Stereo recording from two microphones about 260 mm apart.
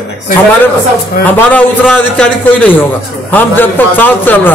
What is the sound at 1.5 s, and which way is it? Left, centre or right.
A man's voice, centre.